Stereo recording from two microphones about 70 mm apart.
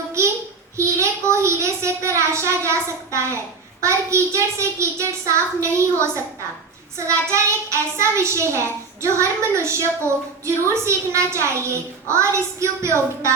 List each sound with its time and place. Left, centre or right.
0.8 s a child's voice: right